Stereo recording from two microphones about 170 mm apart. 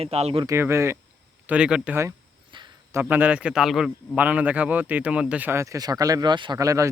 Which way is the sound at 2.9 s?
10° right (ahead or behind).